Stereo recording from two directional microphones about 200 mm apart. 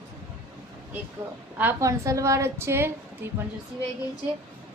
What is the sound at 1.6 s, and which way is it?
A woman's voice, 10° right (ahead or behind).